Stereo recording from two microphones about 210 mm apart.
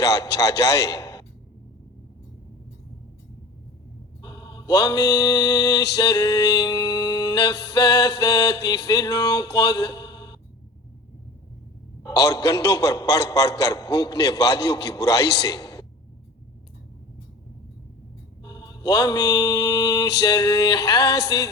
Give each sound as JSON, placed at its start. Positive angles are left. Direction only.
{"t": 0.0, "sound": "a man's voice", "side_deg": 15}
{"t": 4.2, "sound": "mantra", "side_deg": 20}
{"t": 6.0, "sound": "music", "side_deg": 15}
{"t": 7.7, "sound": "a man's voice", "side_deg": 20}
{"t": 9.6, "sound": "a sound", "side_deg": 20}
{"t": 12.0, "sound": "a man's voice", "side_deg": 15}
{"t": 18.4, "sound": "mantra", "side_deg": 20}
{"t": 20.2, "sound": "a man's voice", "side_deg": 15}
{"t": 21.0, "sound": "a woman's voice", "side_deg": 55}